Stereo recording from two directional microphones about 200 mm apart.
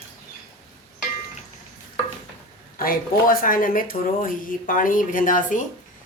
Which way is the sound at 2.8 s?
45° left (ahead or behind).